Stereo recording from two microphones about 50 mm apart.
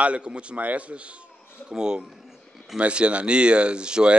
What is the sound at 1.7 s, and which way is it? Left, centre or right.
Speech, centre.